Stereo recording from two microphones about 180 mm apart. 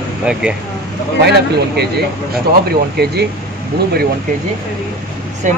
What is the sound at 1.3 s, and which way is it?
Speech, 65° right (ahead or behind).